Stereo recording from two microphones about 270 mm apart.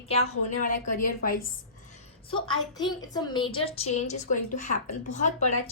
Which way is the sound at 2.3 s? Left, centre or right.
Centre.